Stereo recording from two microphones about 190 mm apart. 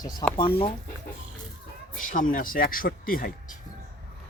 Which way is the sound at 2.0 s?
45° left (ahead or behind).